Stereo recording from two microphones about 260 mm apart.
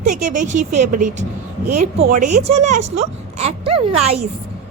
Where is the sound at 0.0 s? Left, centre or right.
Right.